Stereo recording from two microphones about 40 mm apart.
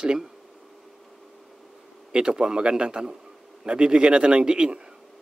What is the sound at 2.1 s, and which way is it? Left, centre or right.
Speech, centre.